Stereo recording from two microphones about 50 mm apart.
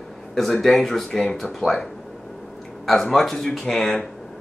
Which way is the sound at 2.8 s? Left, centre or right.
Centre.